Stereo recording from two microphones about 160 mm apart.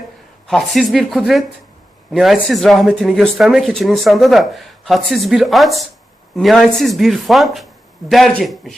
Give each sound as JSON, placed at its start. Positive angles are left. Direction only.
{"t": 0.4, "sound": "speech", "side_deg": 0}